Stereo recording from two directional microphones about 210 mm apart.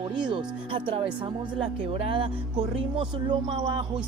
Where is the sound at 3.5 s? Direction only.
25° right (ahead or behind).